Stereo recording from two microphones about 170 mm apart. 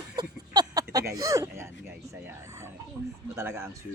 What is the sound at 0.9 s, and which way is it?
Speech, 20° right (ahead or behind).